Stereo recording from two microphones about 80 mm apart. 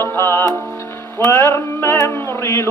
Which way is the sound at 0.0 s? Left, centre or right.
Left.